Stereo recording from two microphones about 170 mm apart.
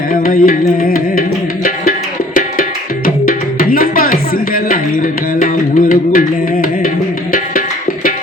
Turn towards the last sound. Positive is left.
turn(degrees=55)  # may be behind; listen again after turning